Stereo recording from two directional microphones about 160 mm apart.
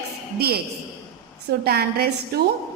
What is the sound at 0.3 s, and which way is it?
Speech, 75° right (ahead or behind).